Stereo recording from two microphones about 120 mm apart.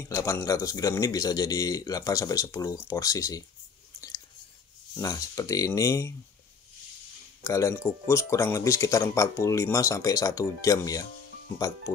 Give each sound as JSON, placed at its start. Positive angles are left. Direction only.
{"t": 0.1, "sound": "speech", "side_deg": 25}
{"t": 4.9, "sound": "speech", "side_deg": 30}
{"t": 7.4, "sound": "speech", "side_deg": 25}